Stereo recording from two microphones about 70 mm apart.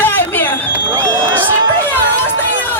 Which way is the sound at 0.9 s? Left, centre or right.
Right.